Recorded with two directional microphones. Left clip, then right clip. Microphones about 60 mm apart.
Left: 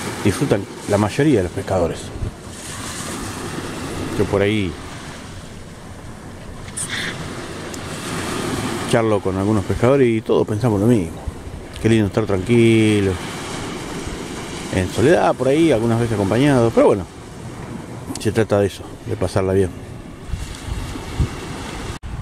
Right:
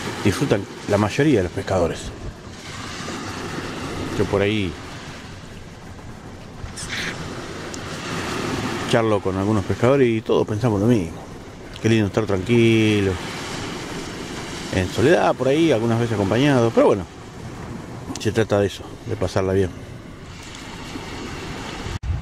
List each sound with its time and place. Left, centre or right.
0.0 s a sound: centre
0.3 s speech: centre
2.8 s vehicle: left
4.1 s a sound: centre
4.4 s speech: centre
6.9 s a sound: centre
7.2 s vehicle: left
7.8 s vehicle: left
8.8 s speech: centre
18.1 s speech: centre
20.9 s vehicle: centre